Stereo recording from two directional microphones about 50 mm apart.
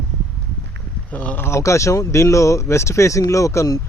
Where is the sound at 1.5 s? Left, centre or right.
Left.